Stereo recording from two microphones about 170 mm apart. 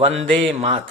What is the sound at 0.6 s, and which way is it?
Speech, 35° right (ahead or behind).